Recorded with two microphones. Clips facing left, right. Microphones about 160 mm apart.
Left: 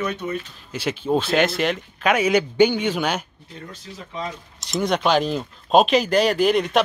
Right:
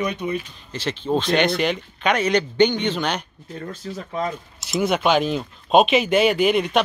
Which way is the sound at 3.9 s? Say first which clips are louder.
Right 8 dB; 45° right (ahead or behind).